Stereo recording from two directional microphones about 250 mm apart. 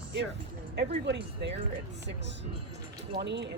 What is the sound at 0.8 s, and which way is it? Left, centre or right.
Speech, right.